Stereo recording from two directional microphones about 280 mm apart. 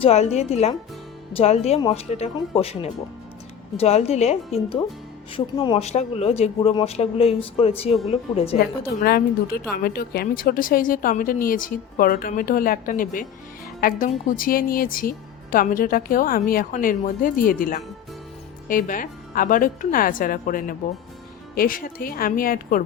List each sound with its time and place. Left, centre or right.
0.0 s speech: left
9.0 s speech: left